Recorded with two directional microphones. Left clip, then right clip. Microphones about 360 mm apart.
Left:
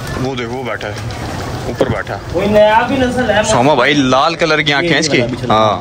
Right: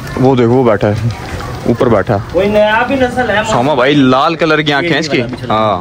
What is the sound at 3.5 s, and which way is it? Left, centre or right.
A man's voice, centre.